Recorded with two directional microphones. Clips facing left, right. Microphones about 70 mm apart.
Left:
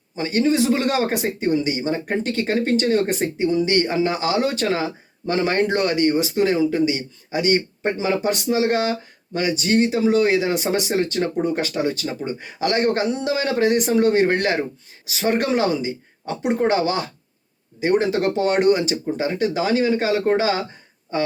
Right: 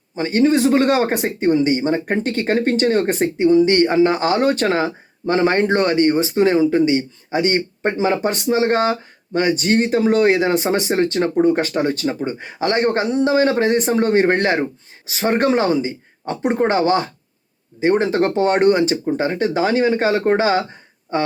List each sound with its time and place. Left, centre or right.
0.2 s speech: right